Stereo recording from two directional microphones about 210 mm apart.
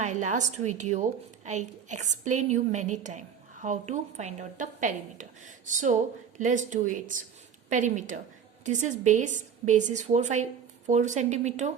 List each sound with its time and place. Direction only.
0.0 s a woman's voice: 35° right (ahead or behind)